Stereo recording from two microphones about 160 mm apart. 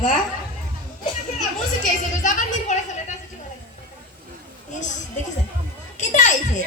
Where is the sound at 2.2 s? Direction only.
50° left (ahead or behind).